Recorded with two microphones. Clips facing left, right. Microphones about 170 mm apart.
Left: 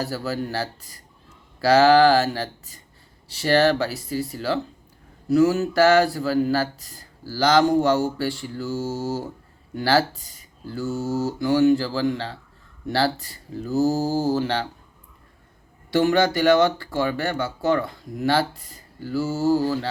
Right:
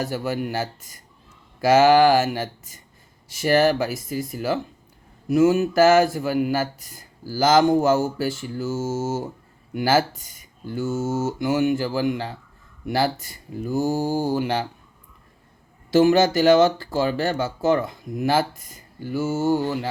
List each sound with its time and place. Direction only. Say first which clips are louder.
0.0 s speech: right 1 dB; 15° right (ahead or behind)
15.9 s speech: right 3 dB; 25° right (ahead or behind)